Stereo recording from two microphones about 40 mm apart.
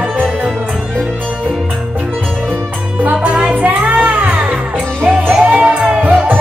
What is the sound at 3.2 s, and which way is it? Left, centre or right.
Music, right.